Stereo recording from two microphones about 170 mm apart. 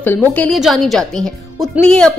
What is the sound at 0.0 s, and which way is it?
A woman's voice, 10° left (ahead or behind).